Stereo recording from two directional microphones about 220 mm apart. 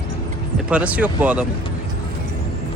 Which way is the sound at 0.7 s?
5° right (ahead or behind).